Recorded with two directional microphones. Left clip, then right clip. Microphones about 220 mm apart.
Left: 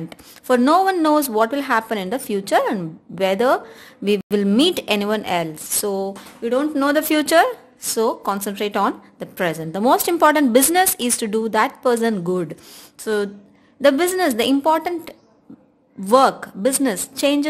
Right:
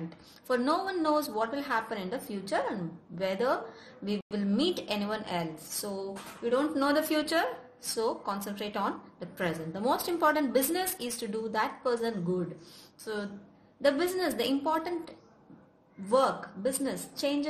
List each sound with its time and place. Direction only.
0.5 s a woman's voice: 45° left (ahead or behind)